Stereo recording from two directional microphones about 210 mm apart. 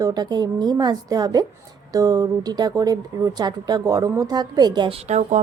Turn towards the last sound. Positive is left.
turn(degrees=-35)  # may be behind; listen again after turning